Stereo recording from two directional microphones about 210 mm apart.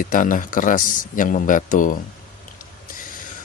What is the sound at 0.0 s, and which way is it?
A man's voice, 40° left (ahead or behind).